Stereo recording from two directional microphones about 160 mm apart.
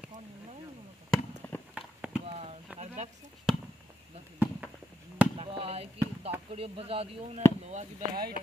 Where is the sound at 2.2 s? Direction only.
35° right (ahead or behind).